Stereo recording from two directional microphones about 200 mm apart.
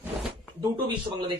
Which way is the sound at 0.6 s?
20° right (ahead or behind).